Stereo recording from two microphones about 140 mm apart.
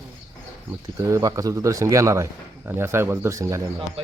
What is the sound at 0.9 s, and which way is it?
Speech, 20° right (ahead or behind).